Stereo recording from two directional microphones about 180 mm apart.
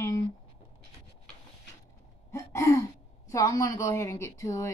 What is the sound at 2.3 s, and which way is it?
A woman's voice, 15° left (ahead or behind).